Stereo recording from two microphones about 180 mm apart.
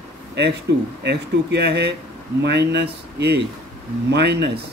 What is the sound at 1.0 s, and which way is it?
Speech, 70° right (ahead or behind).